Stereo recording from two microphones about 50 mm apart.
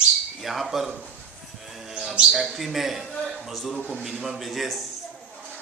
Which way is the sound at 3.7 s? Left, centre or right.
Centre.